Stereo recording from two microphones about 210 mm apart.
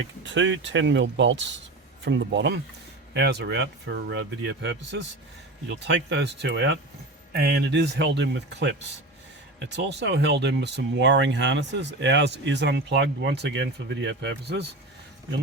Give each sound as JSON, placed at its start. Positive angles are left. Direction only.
{"t": 0.3, "sound": "speech", "side_deg": -60}